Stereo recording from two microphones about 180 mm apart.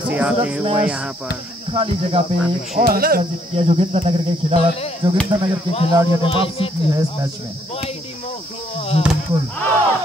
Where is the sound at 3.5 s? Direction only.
35° right (ahead or behind).